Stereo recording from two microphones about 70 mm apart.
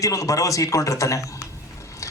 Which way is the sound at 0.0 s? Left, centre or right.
Left.